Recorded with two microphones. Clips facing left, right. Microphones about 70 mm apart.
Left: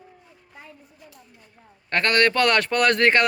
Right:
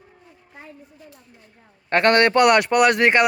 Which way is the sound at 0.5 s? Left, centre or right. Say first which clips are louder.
Right 3 dB; right.